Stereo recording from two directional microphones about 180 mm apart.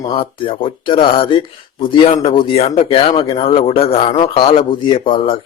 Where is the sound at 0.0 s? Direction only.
30° left (ahead or behind).